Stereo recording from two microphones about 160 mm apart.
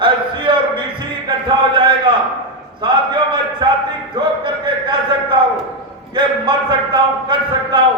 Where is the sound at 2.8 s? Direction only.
25° right (ahead or behind).